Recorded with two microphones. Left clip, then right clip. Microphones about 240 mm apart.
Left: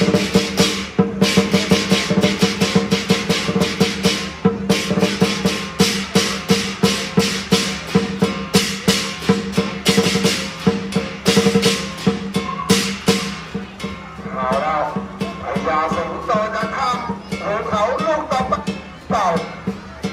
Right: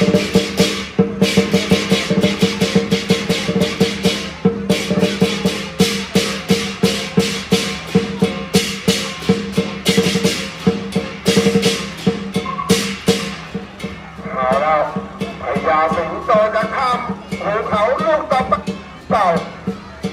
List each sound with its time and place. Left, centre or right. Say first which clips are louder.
0.0 s music: right 2 dB; centre
14.3 s music: right 4 dB; centre